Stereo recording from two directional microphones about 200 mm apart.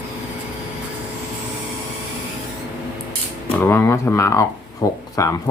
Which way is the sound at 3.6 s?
10° left (ahead or behind).